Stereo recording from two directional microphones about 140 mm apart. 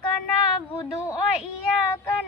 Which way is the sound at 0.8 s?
20° left (ahead or behind).